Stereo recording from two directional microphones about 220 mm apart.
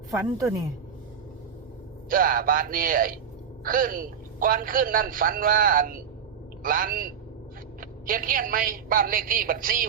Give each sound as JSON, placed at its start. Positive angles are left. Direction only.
{"t": 0.1, "sound": "speech", "side_deg": -15}
{"t": 2.0, "sound": "a man's voice", "side_deg": -40}